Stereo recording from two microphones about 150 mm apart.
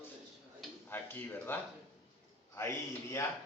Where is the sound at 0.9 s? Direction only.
15° left (ahead or behind).